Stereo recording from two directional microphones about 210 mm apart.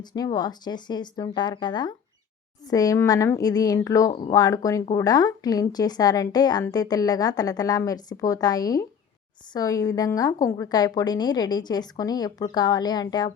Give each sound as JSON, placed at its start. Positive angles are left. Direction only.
{"t": 0.0, "sound": "a woman's voice", "side_deg": 20}